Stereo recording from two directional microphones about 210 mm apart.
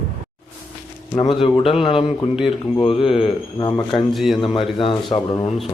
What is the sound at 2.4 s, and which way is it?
A man's voice, 25° left (ahead or behind).